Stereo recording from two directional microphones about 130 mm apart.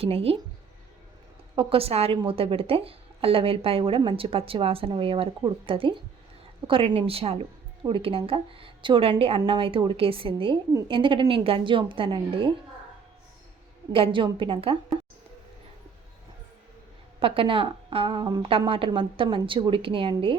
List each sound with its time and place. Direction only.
0.0 s a woman's voice: 50° right (ahead or behind)
1.5 s a woman's voice: 45° right (ahead or behind)
13.9 s a woman's voice: 40° right (ahead or behind)
17.2 s a woman's voice: 45° right (ahead or behind)